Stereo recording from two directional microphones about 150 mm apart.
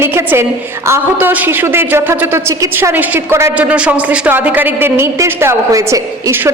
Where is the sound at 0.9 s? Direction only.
15° right (ahead or behind).